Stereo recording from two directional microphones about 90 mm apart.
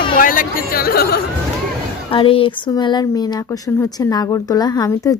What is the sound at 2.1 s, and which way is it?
Speech, 80° left.